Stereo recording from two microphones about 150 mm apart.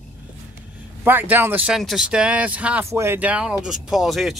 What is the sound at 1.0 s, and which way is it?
Speech, 15° right (ahead or behind).